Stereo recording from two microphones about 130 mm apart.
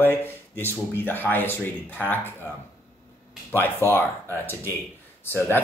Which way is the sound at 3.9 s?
15° left (ahead or behind).